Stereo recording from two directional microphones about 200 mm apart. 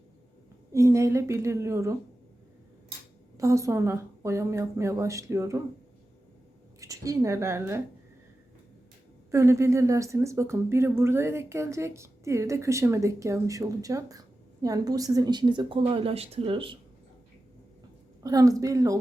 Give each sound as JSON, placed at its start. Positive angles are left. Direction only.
{"t": 0.7, "sound": "speech", "side_deg": -15}
{"t": 3.3, "sound": "speech", "side_deg": -15}
{"t": 6.7, "sound": "speech", "side_deg": -15}
{"t": 9.3, "sound": "speech", "side_deg": -15}
{"t": 18.2, "sound": "speech", "side_deg": -20}